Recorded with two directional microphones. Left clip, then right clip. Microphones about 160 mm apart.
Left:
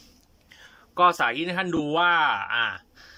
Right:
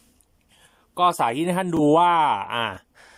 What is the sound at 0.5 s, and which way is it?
Speech, 15° right (ahead or behind).